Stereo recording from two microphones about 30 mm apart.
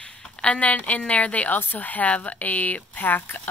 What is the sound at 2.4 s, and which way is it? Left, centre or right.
Speech, left.